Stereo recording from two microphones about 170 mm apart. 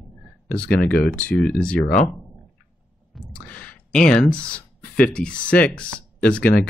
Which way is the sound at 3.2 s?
10° left (ahead or behind).